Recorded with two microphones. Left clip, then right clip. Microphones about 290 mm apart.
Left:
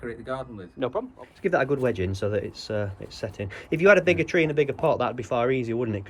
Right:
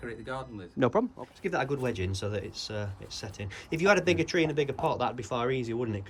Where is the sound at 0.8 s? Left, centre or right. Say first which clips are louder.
Right 2 dB; right.